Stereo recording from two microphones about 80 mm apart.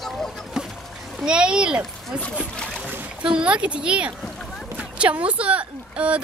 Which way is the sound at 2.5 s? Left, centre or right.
Centre.